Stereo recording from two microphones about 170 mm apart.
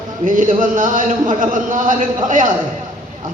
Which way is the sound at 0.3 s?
50° right (ahead or behind).